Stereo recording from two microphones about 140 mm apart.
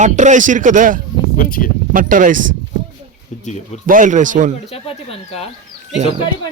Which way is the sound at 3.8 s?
70° right (ahead or behind).